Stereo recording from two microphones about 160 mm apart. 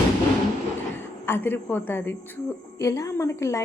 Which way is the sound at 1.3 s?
15° left (ahead or behind).